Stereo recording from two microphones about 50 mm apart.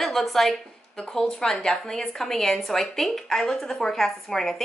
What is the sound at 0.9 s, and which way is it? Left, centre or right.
Speech, centre.